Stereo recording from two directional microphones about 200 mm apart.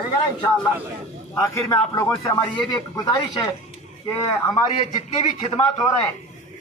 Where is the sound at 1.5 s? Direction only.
15° left (ahead or behind).